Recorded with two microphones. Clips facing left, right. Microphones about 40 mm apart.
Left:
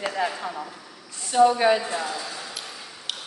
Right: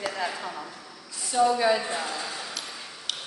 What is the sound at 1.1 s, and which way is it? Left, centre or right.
Speech, left.